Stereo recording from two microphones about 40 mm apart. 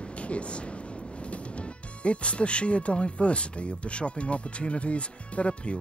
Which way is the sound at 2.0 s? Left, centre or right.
Left.